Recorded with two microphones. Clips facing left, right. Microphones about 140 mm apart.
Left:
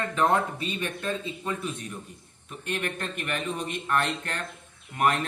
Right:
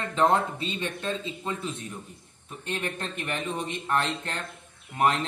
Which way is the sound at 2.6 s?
30° right (ahead or behind).